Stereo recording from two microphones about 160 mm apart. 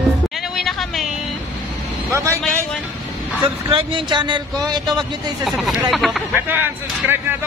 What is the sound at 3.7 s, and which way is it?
A man's voice, 30° right (ahead or behind).